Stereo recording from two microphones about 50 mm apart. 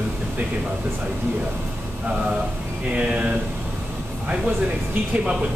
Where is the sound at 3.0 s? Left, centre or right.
Right.